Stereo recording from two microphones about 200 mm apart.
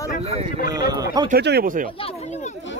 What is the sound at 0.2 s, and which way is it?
Speech, 30° right (ahead or behind).